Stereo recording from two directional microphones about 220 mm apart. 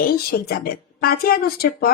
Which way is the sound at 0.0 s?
45° left (ahead or behind).